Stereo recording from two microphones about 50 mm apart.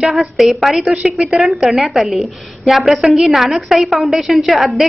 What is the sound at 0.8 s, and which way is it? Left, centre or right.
Speech, centre.